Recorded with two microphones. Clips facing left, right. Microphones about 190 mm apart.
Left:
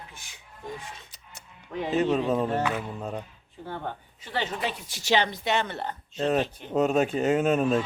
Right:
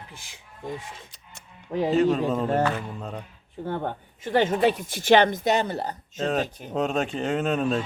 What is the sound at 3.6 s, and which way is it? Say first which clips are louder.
A woman's voice: right 6 dB; 55° right (ahead or behind).